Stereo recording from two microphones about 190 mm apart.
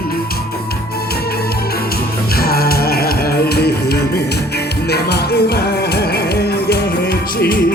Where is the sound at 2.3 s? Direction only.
55° left (ahead or behind).